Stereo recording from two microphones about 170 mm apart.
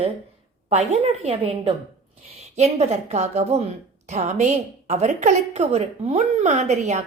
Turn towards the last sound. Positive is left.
turn(degrees=-40)  # may be behind; listen again after turning